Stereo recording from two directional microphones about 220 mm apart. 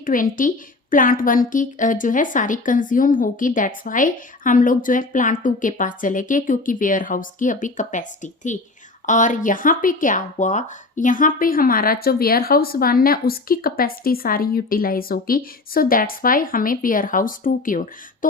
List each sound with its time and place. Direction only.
0.0 s speech: 40° left (ahead or behind)